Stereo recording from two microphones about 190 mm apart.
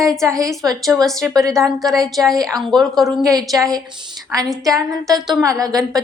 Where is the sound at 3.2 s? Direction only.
20° right (ahead or behind).